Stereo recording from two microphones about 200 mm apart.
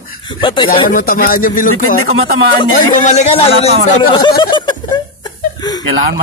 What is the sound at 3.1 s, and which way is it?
Speech, 35° left (ahead or behind).